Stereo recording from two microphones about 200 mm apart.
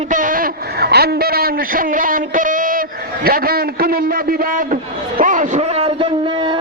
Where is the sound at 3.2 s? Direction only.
50° right (ahead or behind).